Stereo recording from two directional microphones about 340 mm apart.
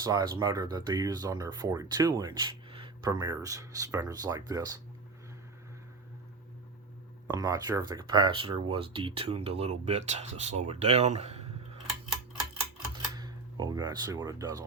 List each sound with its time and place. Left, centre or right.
0.0 s speech: centre
7.3 s speech: centre
12.9 s a sound: centre